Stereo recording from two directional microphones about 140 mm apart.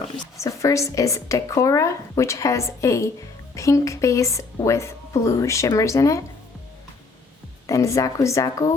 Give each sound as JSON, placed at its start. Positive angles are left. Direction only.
{"t": 0.3, "sound": "speech", "side_deg": 20}
{"t": 7.7, "sound": "speech", "side_deg": 20}